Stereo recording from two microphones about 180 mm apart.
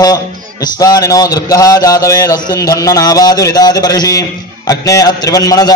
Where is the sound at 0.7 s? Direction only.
20° left (ahead or behind).